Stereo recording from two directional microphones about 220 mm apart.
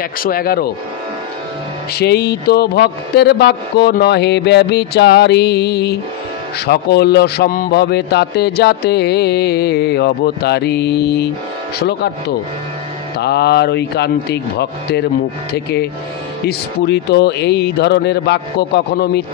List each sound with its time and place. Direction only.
0.2 s speech: 40° left (ahead or behind)
2.0 s speech: 45° left (ahead or behind)
13.2 s speech: 50° left (ahead or behind)